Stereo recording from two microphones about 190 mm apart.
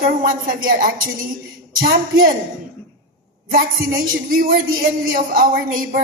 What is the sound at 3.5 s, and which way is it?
Speech, 50° right (ahead or behind).